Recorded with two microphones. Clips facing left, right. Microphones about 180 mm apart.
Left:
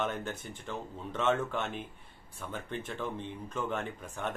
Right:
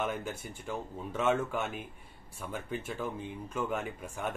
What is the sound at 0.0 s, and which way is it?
Speech, 10° right (ahead or behind).